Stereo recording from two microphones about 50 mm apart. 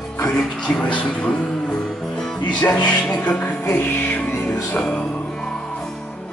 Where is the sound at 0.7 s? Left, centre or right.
Centre.